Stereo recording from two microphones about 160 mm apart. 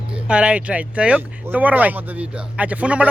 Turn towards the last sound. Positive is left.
turn(degrees=-10)  # may be behind; listen again after turning